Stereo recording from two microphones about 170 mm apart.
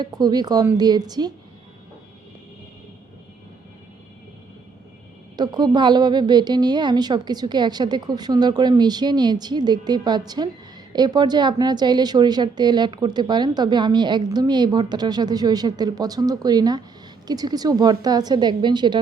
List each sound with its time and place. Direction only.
0.0 s a woman's voice: 25° right (ahead or behind)
5.4 s a woman's voice: 25° right (ahead or behind)